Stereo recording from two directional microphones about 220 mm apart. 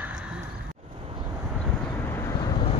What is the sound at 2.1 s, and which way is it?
Vehicle, 10° left (ahead or behind).